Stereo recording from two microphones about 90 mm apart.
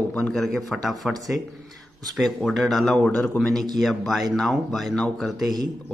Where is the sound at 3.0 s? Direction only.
15° left (ahead or behind).